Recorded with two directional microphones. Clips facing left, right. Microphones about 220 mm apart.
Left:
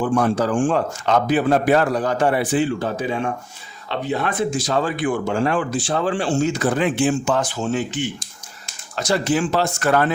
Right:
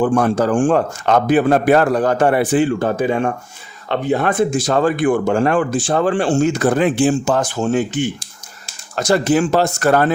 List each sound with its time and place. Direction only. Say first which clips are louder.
0.0 s speech: right 4 dB; 50° right (ahead or behind)